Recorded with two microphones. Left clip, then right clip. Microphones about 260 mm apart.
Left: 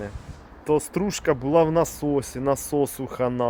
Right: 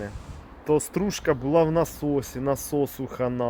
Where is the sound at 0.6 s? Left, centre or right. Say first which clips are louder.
Left 1 dB; centre.